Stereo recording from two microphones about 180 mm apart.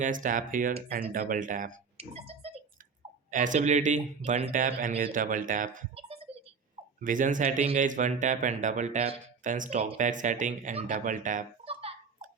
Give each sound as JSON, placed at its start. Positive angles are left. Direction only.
{"t": 0.0, "sound": "speech", "side_deg": -45}
{"t": 2.0, "sound": "music", "side_deg": -35}
{"t": 3.3, "sound": "speech", "side_deg": -45}
{"t": 6.0, "sound": "a sound", "side_deg": -35}
{"t": 7.0, "sound": "speech", "side_deg": -45}
{"t": 11.6, "sound": "a sound", "side_deg": -35}